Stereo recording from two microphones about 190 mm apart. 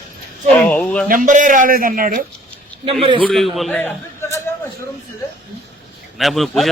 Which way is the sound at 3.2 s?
Centre (ahead or behind).